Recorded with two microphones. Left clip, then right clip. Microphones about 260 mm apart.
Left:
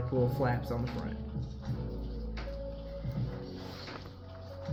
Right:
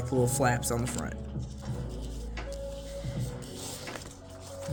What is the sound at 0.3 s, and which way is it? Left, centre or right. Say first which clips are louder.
Speech: right 5 dB; right.